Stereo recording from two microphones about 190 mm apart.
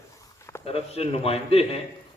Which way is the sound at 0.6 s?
30° left (ahead or behind).